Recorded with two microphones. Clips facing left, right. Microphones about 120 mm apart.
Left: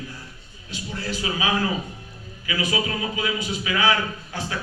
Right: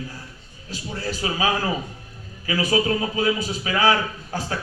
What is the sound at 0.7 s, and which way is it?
A man's voice, 40° right (ahead or behind).